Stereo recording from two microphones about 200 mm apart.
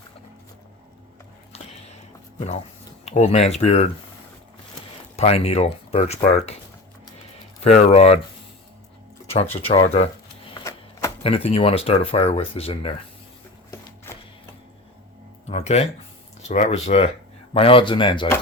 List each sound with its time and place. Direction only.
1.5 s a sound: 30° left (ahead or behind)
3.1 s speech: 35° left (ahead or behind)
5.1 s speech: 30° left (ahead or behind)
7.6 s speech: 35° left (ahead or behind)
9.6 s speech: 30° left (ahead or behind)
10.5 s typewriter: 15° left (ahead or behind)
11.2 s speech: 30° left (ahead or behind)
15.4 s speech: 30° left (ahead or behind)